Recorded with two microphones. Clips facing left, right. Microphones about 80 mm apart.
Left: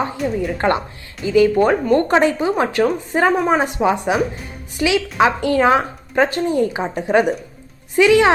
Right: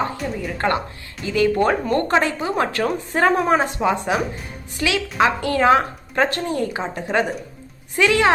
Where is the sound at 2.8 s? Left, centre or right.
Centre; by 5.6 s left.